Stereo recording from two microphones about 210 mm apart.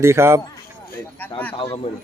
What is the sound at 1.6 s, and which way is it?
Speech, 25° left (ahead or behind).